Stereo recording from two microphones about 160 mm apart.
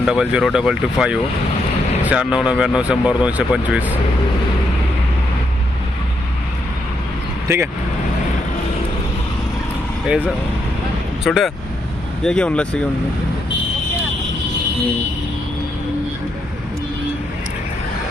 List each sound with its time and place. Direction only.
0.0 s speech: 5° right (ahead or behind)
7.4 s speech: 15° right (ahead or behind)
11.3 s speech: centre (ahead or behind)